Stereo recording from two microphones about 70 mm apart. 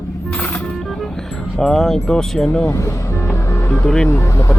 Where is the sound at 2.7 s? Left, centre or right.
Left.